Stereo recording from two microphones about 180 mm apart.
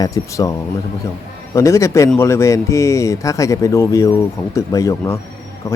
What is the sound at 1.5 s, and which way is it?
Speech, 15° left (ahead or behind).